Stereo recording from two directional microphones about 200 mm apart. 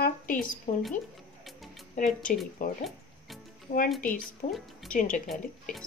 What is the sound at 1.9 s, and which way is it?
Speech, 40° left (ahead or behind).